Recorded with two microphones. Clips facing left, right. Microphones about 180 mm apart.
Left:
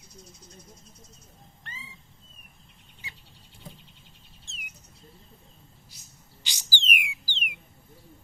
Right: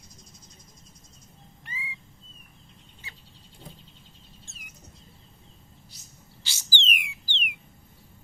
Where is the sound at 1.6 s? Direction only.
10° right (ahead or behind).